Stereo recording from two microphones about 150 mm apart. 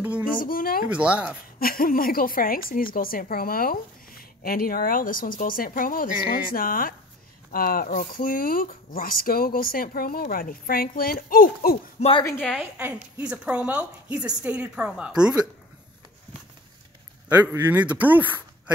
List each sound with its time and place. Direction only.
0.4 s a woman's voice: 70° left (ahead or behind)
0.8 s a woman's voice: 10° right (ahead or behind)
1.6 s a woman's voice: 75° left (ahead or behind)
12.4 s a woman's voice: 10° right (ahead or behind)
17.3 s a woman's voice: 15° right (ahead or behind)